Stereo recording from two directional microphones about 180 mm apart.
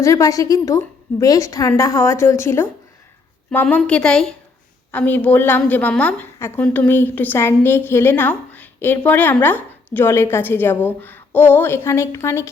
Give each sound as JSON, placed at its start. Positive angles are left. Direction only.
{"t": 0.0, "sound": "a woman's voice", "side_deg": 20}